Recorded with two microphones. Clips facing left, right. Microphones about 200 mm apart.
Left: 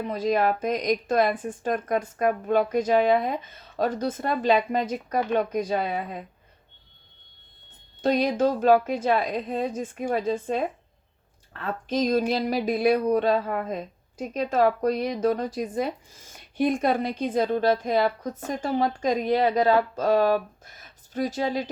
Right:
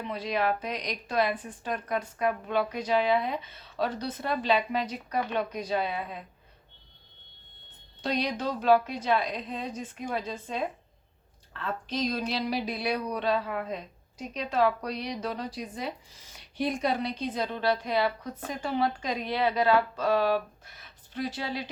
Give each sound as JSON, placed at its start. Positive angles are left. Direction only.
{"t": 0.0, "sound": "speech", "side_deg": 45}
{"t": 8.0, "sound": "speech", "side_deg": 50}